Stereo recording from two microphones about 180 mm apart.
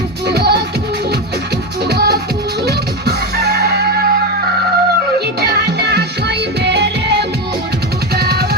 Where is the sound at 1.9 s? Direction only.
65° right (ahead or behind).